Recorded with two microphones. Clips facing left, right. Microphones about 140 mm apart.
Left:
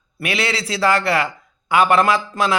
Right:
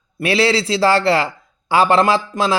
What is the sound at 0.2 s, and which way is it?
A man's voice, 30° right (ahead or behind).